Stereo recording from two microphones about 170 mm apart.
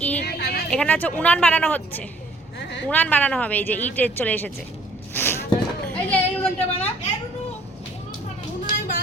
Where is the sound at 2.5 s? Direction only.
90° left.